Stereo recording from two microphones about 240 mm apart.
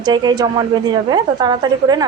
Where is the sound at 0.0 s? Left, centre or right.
Centre.